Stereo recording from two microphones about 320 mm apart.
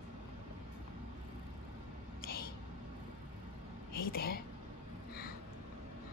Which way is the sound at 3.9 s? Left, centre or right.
Left.